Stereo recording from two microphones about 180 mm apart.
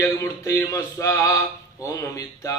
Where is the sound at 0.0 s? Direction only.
15° left (ahead or behind).